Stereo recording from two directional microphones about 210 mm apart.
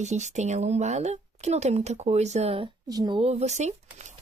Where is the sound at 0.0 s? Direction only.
35° right (ahead or behind).